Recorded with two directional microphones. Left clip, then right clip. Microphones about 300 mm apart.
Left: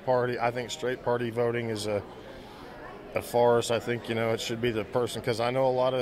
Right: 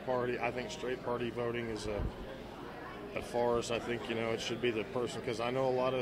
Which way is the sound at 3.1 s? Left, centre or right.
Left.